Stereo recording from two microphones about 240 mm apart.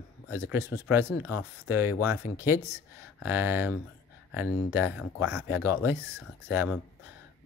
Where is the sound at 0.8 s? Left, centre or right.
Centre.